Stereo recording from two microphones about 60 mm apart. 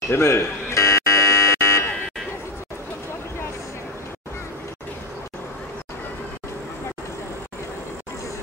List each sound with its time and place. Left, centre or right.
0.1 s buzzer: left